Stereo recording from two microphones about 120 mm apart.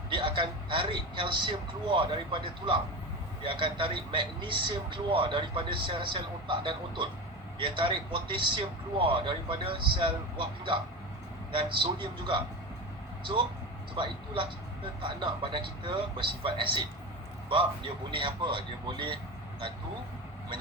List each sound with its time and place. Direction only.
0.1 s speech: 45° right (ahead or behind)
13.9 s speech: 45° right (ahead or behind)
18.1 s speech: 45° right (ahead or behind)